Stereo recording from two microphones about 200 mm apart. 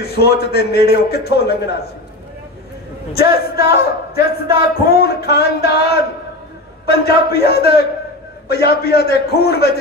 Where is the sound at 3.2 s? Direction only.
50° left (ahead or behind).